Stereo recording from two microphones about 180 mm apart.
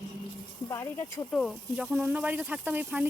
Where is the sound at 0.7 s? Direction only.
15° left (ahead or behind).